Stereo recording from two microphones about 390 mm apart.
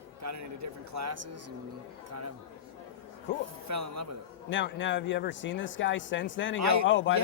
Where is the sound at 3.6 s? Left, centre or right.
Right.